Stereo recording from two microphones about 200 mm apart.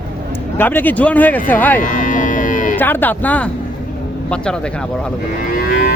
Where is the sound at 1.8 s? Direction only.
40° left (ahead or behind).